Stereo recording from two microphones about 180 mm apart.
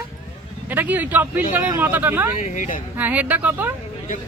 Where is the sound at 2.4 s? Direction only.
45° left (ahead or behind).